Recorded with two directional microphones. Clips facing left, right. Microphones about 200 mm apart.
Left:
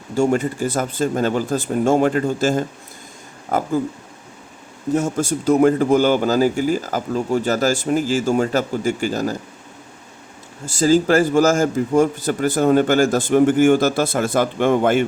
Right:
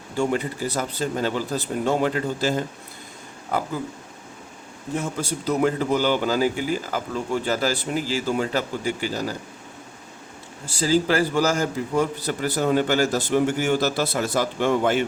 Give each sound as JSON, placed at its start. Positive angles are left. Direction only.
{"t": 0.2, "sound": "a man's voice", "side_deg": 45}
{"t": 4.9, "sound": "a man's voice", "side_deg": 45}
{"t": 10.7, "sound": "a man's voice", "side_deg": 45}